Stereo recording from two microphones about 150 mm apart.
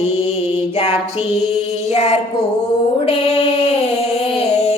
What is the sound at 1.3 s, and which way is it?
Music, 45° left (ahead or behind).